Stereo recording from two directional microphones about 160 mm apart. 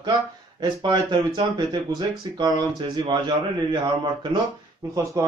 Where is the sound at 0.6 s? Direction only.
30° right (ahead or behind).